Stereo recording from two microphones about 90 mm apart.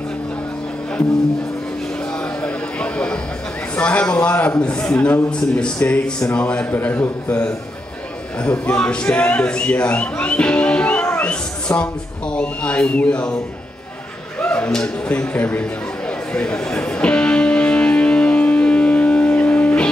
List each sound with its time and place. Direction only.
2.4 s a sound: 15° left (ahead or behind)
3.7 s a man's voice: 15° left (ahead or behind)
14.4 s speech: 15° left (ahead or behind)
16.3 s music: 10° left (ahead or behind)